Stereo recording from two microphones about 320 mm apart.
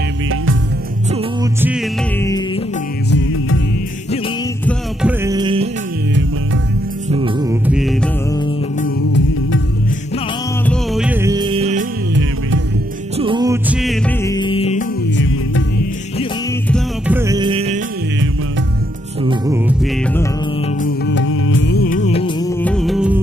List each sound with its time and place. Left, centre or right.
1.1 s music: centre
2.1 s music: centre
3.1 s music: left
4.6 s music: centre
7.1 s music: centre
8.8 s music: left
10.7 s music: centre
13.2 s music: centre
15.1 s music: left
16.6 s music: centre
17.2 s music: centre
19.2 s music: centre
20.8 s music: left; by 22.5 s centre
22.6 s music: centre